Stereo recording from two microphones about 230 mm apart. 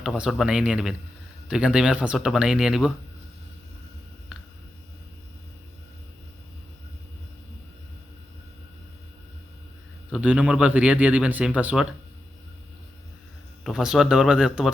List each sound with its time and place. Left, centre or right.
0.0 s a man's voice: centre
10.1 s a man's voice: centre
13.7 s a man's voice: centre